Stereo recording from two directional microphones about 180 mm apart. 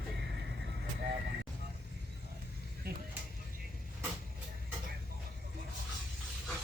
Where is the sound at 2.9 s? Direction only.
60° right (ahead or behind).